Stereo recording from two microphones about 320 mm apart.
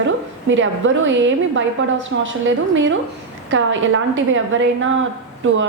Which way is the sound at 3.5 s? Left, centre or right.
Right.